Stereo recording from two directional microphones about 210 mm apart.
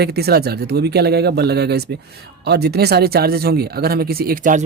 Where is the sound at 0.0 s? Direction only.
50° right (ahead or behind).